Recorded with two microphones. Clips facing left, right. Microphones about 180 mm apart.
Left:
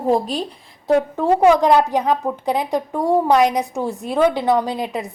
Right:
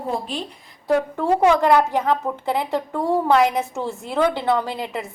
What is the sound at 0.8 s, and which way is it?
A woman's voice, 15° left (ahead or behind).